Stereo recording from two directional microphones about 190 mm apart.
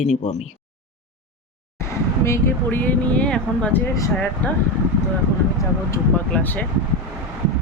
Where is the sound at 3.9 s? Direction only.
15° left (ahead or behind).